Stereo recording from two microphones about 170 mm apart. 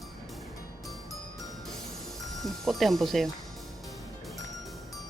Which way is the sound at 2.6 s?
Centre (ahead or behind).